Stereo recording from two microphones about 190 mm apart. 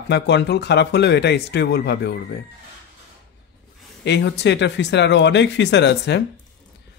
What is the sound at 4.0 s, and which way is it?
Speech, 65° left (ahead or behind).